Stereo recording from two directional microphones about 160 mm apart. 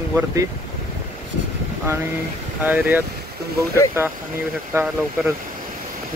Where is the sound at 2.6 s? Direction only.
10° right (ahead or behind).